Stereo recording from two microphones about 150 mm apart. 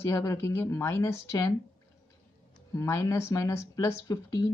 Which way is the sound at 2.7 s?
20° left (ahead or behind).